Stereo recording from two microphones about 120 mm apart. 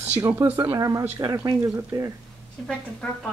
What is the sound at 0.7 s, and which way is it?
Speech, 25° right (ahead or behind).